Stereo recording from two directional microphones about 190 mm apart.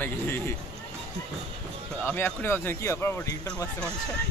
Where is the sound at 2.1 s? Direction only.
5° left (ahead or behind).